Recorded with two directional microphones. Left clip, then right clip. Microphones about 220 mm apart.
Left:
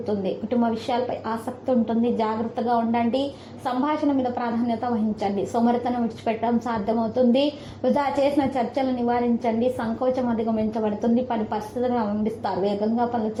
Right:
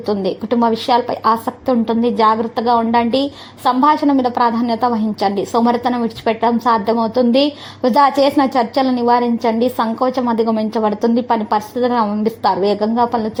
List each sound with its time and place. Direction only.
0.2 s a woman's voice: 45° right (ahead or behind)